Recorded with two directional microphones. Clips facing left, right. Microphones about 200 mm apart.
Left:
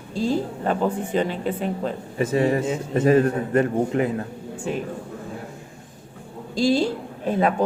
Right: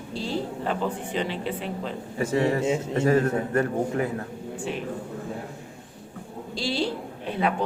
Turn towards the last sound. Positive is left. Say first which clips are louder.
# left 5 dB
turn(degrees=45)  # may be behind; listen again after turning